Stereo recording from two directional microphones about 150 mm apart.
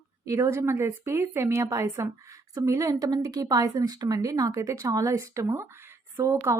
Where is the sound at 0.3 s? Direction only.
20° right (ahead or behind).